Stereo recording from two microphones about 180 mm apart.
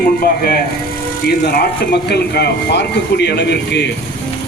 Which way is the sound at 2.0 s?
65° left (ahead or behind).